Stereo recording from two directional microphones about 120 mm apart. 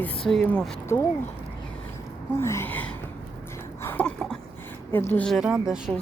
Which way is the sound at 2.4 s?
20° left (ahead or behind).